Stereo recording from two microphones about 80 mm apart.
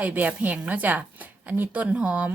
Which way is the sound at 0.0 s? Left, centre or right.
Centre.